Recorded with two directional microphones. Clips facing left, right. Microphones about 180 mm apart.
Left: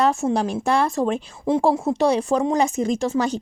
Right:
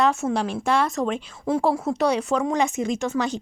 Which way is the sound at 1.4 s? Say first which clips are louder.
Left 3 dB; 25° left (ahead or behind).